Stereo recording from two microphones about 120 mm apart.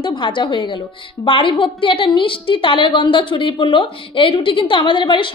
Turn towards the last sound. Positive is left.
turn(degrees=40)  # may be behind; listen again after turning